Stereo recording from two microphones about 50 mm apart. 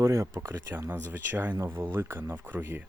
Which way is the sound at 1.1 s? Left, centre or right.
Right.